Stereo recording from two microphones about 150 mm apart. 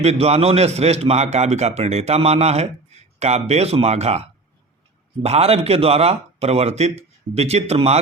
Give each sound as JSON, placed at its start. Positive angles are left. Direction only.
{"t": 0.0, "sound": "speech", "side_deg": -45}